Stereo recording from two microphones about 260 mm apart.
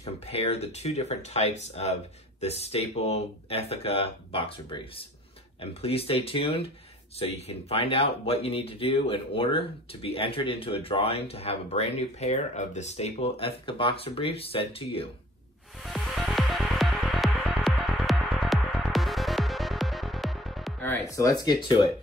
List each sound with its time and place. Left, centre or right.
0.0 s speech: left
15.8 s music: centre